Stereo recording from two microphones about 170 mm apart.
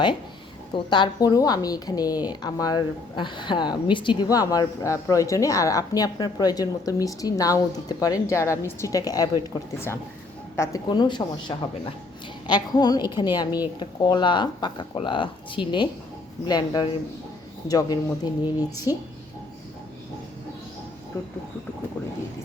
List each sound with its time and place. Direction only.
0.9 s a woman's voice: 25° left (ahead or behind)